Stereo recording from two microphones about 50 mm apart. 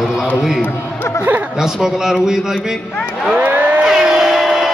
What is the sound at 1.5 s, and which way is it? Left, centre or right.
A man's voice, centre.